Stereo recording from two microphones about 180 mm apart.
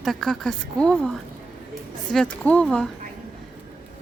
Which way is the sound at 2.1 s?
5° left (ahead or behind).